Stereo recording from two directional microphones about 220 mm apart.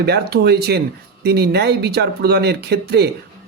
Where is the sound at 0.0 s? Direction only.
45° right (ahead or behind).